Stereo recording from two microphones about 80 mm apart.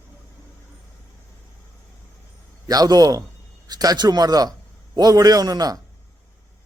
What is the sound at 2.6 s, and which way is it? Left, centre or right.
A man's voice, right.